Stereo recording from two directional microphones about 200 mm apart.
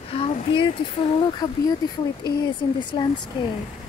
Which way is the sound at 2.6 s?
20° left (ahead or behind).